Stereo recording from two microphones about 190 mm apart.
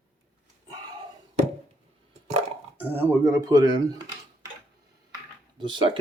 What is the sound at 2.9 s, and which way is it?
Speech, 15° right (ahead or behind).